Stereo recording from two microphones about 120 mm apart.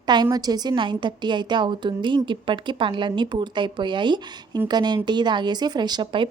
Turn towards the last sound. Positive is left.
turn(degrees=-40)  # may be behind; listen again after turning